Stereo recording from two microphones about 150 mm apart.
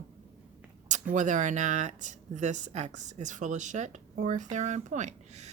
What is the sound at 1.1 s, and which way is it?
A woman's voice, 55° right (ahead or behind).